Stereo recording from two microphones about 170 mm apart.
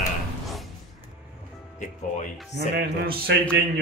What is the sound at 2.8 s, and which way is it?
Mantra, 65° right (ahead or behind).